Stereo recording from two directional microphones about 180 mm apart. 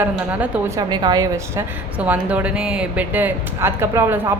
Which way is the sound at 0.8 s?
25° right (ahead or behind).